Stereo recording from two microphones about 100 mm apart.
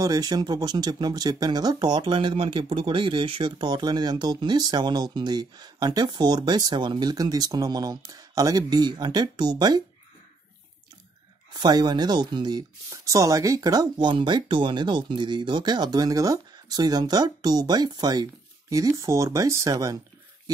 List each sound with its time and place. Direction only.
0.0 s speech: 35° right (ahead or behind)
11.6 s speech: 45° right (ahead or behind)
12.9 s speech: 35° right (ahead or behind)